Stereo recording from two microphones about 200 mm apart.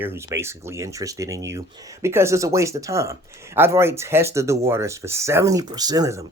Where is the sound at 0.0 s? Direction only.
10° right (ahead or behind).